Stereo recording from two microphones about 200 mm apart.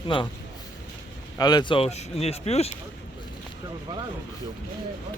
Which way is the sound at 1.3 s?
20° left (ahead or behind).